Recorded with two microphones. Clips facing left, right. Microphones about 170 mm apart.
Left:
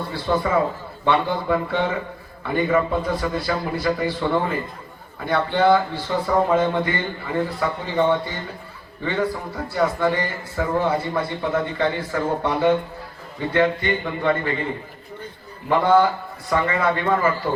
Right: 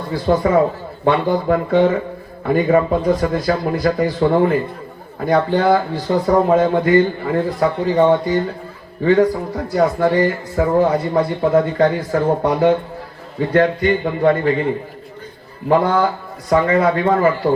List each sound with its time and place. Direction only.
0.1 s speech: 45° right (ahead or behind)
15.7 s speech: 45° right (ahead or behind)